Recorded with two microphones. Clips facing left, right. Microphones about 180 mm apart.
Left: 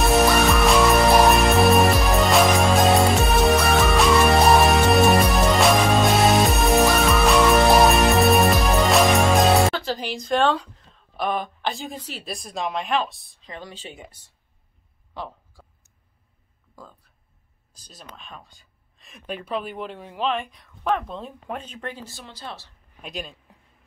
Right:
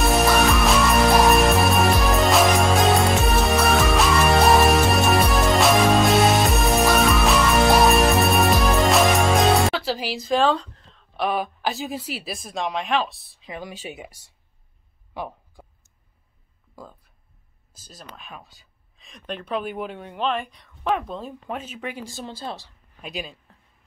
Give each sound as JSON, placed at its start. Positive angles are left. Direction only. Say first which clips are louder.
{"t": 0.0, "sound": "music", "louder": "left 1 dB", "side_deg": 0}
{"t": 11.1, "sound": "speech", "louder": "right 1 dB", "side_deg": -5}
{"t": 15.1, "sound": "a sound", "louder": "right 2 dB", "side_deg": -15}
{"t": 17.7, "sound": "speech", "louder": "right 1 dB", "side_deg": -5}
{"t": 22.2, "sound": "speech", "louder": "right 7 dB", "side_deg": -30}
{"t": 23.0, "sound": "speech", "louder": "right 1 dB", "side_deg": 0}